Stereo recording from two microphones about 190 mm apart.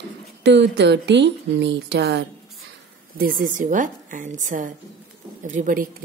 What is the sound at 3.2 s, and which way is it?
A woman's voice, 45° right (ahead or behind).